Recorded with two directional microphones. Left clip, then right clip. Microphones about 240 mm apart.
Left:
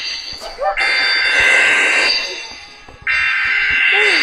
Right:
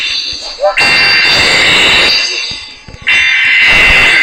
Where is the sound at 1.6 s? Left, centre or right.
Right.